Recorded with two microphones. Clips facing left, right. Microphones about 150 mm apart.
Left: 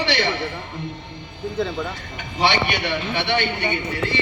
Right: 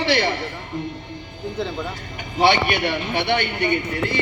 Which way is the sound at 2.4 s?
50° right (ahead or behind).